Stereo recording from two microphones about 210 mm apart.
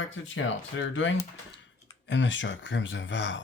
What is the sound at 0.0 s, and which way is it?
Speech, 65° left (ahead or behind).